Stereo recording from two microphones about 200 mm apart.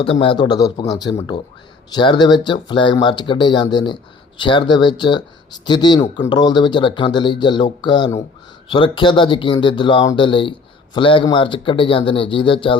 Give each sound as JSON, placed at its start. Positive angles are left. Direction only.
{"t": 0.0, "sound": "speech", "side_deg": 25}